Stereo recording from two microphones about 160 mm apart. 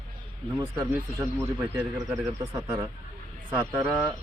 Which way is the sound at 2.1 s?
20° right (ahead or behind).